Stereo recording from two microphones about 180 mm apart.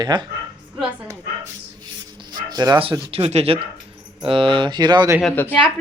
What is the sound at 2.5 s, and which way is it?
Speech, 20° right (ahead or behind).